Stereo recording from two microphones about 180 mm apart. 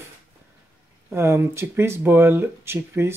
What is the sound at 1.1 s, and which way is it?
Speech, 15° right (ahead or behind).